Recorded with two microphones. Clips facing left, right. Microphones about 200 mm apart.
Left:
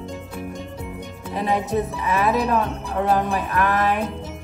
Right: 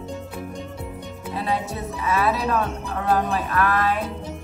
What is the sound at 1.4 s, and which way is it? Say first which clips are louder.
Speech: left 5 dB; 15° left (ahead or behind).